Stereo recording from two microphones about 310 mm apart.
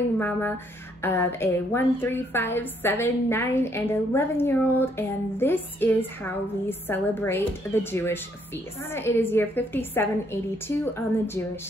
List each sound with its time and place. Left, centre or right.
0.2 s a woman's voice: centre